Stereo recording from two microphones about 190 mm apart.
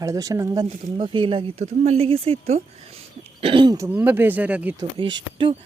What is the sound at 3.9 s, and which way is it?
Speech, 10° right (ahead or behind).